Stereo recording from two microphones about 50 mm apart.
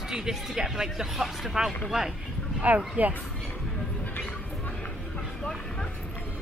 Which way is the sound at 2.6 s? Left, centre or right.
Right.